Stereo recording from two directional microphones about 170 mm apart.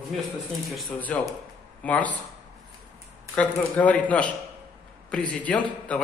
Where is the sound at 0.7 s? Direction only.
Centre (ahead or behind).